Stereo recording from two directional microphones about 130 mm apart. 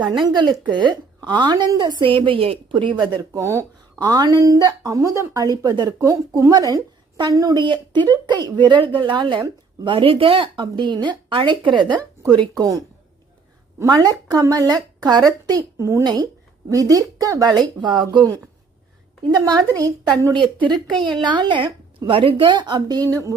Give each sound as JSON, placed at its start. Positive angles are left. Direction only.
{"t": 0.0, "sound": "speech", "side_deg": -35}
{"t": 3.0, "sound": "a woman's voice", "side_deg": -25}
{"t": 19.3, "sound": "a woman's voice", "side_deg": -30}